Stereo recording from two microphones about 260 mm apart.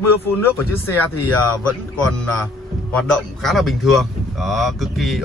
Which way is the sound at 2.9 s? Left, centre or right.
Centre.